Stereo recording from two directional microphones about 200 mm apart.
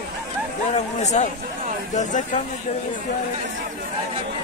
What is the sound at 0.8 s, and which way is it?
Speech, 35° left (ahead or behind).